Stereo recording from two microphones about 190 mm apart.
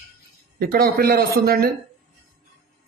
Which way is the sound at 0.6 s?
50° right (ahead or behind).